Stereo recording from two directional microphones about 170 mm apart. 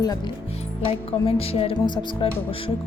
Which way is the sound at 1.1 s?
35° left (ahead or behind).